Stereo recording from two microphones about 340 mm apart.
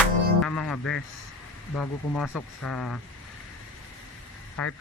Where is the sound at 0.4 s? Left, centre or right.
Centre.